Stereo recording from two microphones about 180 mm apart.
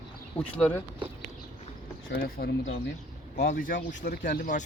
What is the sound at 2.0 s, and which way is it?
Speech, 55° left (ahead or behind).